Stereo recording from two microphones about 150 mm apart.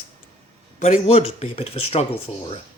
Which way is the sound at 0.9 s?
50° left (ahead or behind).